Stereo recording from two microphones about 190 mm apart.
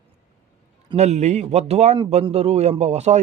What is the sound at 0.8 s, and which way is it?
Speech, 35° right (ahead or behind).